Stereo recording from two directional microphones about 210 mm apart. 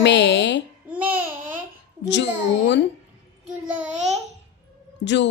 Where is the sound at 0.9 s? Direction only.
5° right (ahead or behind).